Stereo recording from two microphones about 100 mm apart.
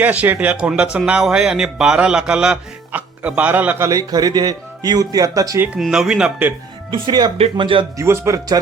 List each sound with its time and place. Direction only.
0.0 s a man's voice: 15° right (ahead or behind)
3.8 s speech: 35° right (ahead or behind)
5.8 s speech: 5° right (ahead or behind)
6.9 s speech: 55° right (ahead or behind)
7.9 s speech: 25° right (ahead or behind)